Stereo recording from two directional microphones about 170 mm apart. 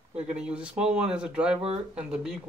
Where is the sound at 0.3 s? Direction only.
5° right (ahead or behind).